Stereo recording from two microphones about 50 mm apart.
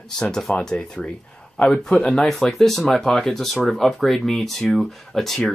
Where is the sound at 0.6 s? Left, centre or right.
Centre.